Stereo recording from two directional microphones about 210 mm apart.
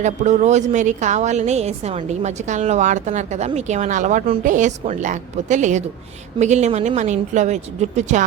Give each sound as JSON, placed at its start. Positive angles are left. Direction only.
{"t": 0.0, "sound": "a woman's voice", "side_deg": -35}